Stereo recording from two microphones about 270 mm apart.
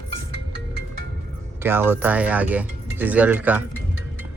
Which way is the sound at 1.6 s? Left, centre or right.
Centre.